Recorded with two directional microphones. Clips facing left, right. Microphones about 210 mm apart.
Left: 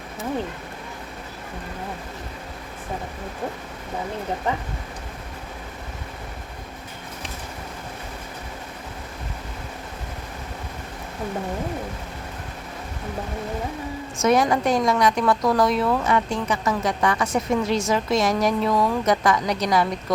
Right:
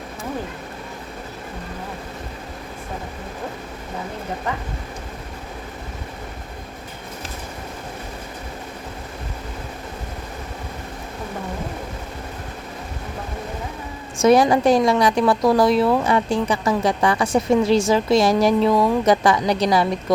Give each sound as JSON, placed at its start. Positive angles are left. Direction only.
{"t": 14.2, "sound": "a woman's voice", "side_deg": -30}